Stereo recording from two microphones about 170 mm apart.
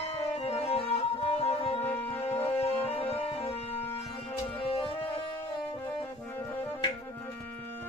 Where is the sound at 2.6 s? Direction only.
35° left (ahead or behind).